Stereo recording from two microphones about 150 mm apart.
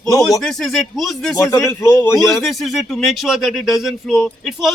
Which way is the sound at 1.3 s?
20° left (ahead or behind).